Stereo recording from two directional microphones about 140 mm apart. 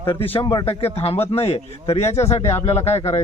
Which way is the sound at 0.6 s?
45° left (ahead or behind).